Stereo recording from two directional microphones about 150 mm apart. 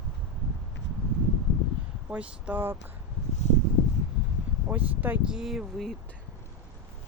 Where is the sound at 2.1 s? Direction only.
10° right (ahead or behind).